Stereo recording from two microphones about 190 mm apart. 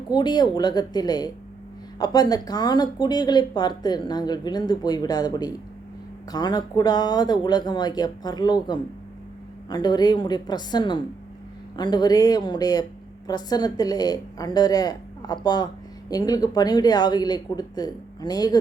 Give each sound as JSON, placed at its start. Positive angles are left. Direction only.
{"t": 0.1, "sound": "a woman's voice", "side_deg": 20}